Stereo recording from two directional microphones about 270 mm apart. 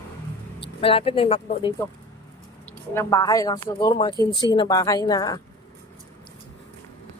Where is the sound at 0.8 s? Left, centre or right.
Left.